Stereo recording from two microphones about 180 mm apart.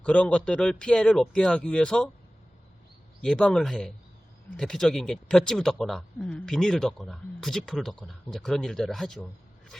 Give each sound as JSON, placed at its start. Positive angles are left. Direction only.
{"t": 0.0, "sound": "speech", "side_deg": 5}
{"t": 3.2, "sound": "speech", "side_deg": 5}